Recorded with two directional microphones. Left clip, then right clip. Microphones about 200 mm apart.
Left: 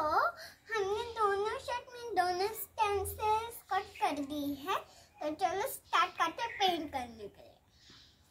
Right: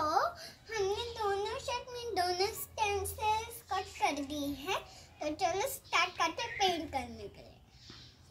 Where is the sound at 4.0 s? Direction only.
10° right (ahead or behind).